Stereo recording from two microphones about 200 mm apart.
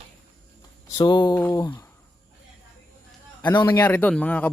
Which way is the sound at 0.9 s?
20° left (ahead or behind).